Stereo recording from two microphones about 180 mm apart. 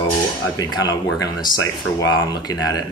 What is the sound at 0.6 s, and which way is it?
Speech, 20° left (ahead or behind).